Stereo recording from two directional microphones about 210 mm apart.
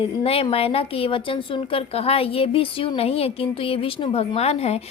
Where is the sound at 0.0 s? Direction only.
25° left (ahead or behind).